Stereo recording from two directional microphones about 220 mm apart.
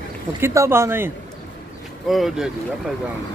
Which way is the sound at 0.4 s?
10° right (ahead or behind).